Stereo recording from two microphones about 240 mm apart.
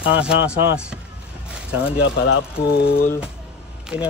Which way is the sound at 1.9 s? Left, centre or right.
Left.